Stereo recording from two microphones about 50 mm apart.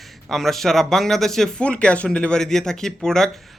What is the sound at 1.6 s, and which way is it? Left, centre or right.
Speech, left.